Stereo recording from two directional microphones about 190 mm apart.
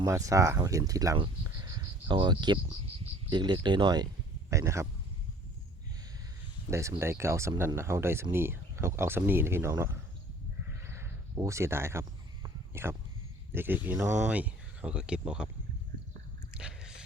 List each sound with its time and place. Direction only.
0.0 s speech: 15° right (ahead or behind)
6.7 s speech: 15° right (ahead or behind)
10.7 s a sound: 15° right (ahead or behind)
13.5 s speech: 10° right (ahead or behind)
16.6 s squish: 5° right (ahead or behind)